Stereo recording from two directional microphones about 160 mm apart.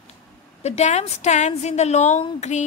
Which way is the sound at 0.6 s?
45° left (ahead or behind).